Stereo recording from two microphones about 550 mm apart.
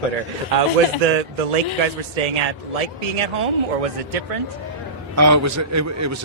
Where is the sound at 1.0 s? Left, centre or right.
Right.